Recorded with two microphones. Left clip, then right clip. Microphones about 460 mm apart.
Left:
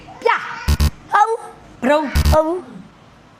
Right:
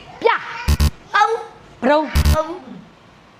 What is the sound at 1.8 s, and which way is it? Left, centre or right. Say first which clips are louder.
Speech: even; right.